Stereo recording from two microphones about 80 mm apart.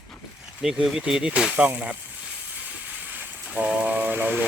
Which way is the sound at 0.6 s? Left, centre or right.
Centre.